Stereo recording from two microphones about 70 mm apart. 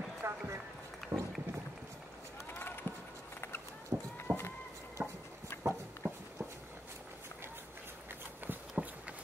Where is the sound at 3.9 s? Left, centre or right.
Right.